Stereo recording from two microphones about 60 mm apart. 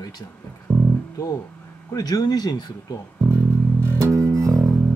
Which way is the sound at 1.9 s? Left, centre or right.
Left.